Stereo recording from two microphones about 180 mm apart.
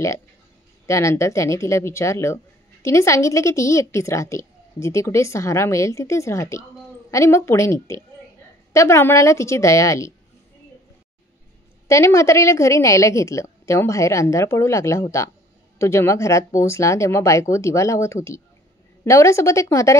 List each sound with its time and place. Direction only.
0.8 s speech: 15° left (ahead or behind)
11.9 s speech: 15° left (ahead or behind)